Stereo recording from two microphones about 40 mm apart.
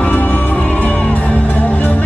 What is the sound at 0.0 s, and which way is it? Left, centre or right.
Music, left.